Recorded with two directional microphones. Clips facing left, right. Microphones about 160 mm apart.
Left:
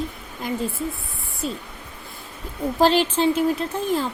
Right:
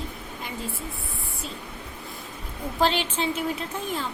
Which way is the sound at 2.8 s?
40° left (ahead or behind).